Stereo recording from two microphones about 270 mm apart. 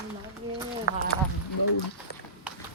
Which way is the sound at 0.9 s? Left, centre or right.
Left.